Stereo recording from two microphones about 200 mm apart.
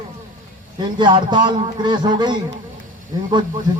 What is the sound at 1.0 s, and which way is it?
Speech, 25° right (ahead or behind).